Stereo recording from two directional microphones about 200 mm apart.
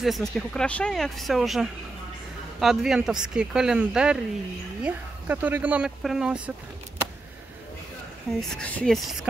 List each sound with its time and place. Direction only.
0.0 s speech: centre (ahead or behind)
8.3 s speech: 5° left (ahead or behind)